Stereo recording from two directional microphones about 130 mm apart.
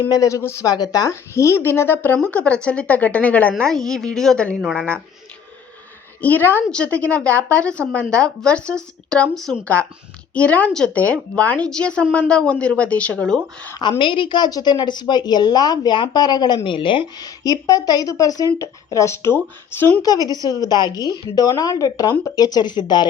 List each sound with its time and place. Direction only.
0.1 s a woman's voice: 25° left (ahead or behind); by 4.9 s centre (ahead or behind)
6.2 s a woman's voice: 15° left (ahead or behind)
14.0 s a woman's voice: 40° left (ahead or behind); by 19.9 s 15° left (ahead or behind)
20.2 s a woman's voice: 30° left (ahead or behind)